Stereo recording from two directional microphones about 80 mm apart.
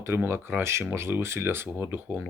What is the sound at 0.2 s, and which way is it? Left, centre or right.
Speech, right.